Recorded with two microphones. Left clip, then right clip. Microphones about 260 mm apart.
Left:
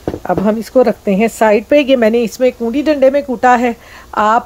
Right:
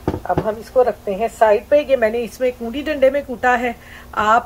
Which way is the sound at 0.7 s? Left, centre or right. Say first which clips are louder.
Left 4 dB; left.